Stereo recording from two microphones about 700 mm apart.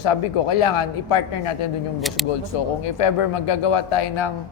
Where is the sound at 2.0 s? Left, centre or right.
Centre.